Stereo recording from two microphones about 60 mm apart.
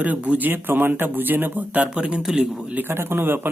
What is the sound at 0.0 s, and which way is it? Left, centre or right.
A man's voice, right.